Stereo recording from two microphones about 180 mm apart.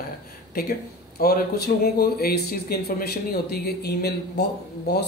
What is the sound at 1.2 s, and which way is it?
Speech, 55° left (ahead or behind).